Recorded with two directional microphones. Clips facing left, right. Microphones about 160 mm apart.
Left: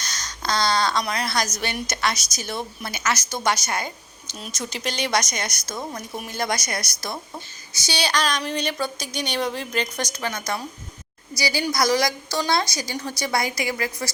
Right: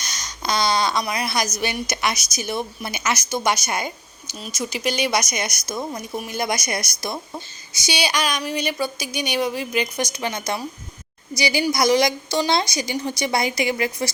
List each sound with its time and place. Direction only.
0.0 s a sound: 15° right (ahead or behind)
1.5 s a woman's voice: 10° right (ahead or behind)
4.4 s a woman's voice: 5° right (ahead or behind); by 14.1 s 20° right (ahead or behind)